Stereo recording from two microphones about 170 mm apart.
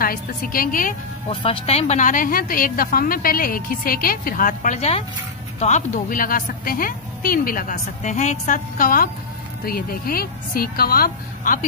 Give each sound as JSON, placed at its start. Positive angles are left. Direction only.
{"t": 0.0, "sound": "a woman's voice", "side_deg": 60}
{"t": 1.3, "sound": "a woman's voice", "side_deg": 30}